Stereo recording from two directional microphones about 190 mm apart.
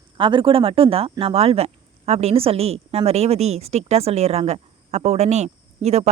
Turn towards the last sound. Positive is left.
turn(degrees=-35)  # may be behind; listen again after turning